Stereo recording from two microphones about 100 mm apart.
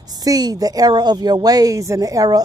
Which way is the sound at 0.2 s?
40° right (ahead or behind).